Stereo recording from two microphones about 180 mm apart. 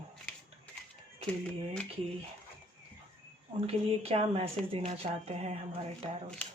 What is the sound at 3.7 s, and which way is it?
Speech, 35° right (ahead or behind).